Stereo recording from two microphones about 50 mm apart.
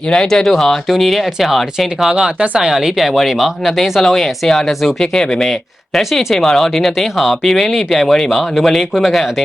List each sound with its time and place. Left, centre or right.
0.1 s speech: centre
2.1 s speech: centre
2.6 s speech: centre
5.5 s speech: centre